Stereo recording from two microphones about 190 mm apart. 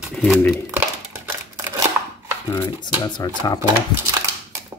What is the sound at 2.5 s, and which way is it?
Speech, 15° left (ahead or behind).